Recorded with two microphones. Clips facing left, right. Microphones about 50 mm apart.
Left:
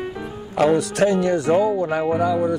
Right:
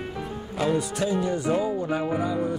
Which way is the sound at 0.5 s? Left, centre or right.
Left.